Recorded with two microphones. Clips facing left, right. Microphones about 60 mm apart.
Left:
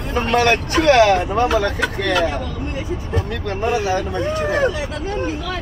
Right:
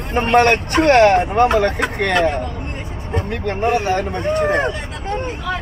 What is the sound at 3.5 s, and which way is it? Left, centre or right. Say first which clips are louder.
Speech: right 2 dB; right.